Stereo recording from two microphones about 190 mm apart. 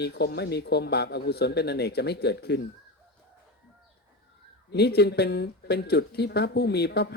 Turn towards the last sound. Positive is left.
turn(degrees=60)  # may be behind; listen again after turning